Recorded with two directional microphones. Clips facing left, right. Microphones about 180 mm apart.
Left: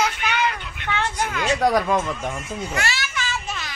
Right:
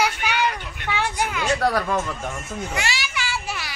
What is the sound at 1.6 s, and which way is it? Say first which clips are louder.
Speech: left 5 dB; 15° left (ahead or behind).